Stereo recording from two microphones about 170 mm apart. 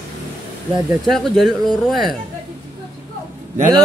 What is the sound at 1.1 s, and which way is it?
Speech, centre (ahead or behind).